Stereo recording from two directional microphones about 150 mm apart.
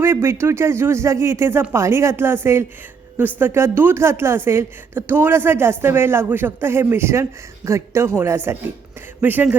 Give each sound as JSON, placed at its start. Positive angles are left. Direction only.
{"t": 0.0, "sound": "speech", "side_deg": -15}